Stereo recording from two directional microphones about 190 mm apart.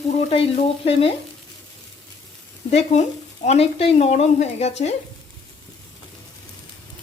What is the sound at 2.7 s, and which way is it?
Speech, 35° left (ahead or behind).